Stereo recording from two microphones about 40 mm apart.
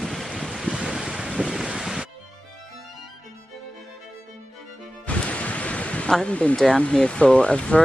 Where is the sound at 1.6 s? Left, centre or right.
Centre.